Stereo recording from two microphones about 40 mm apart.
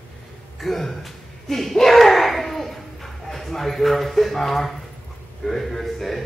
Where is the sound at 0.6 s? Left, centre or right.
Centre.